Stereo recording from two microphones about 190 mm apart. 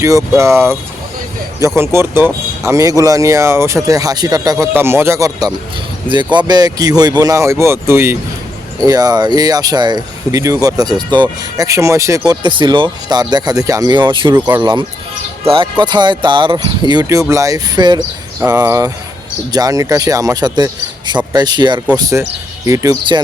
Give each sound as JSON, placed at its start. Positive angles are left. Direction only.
{"t": 0.0, "sound": "speech", "side_deg": -15}
{"t": 14.3, "sound": "speech", "side_deg": -10}
{"t": 14.6, "sound": "speech", "side_deg": -25}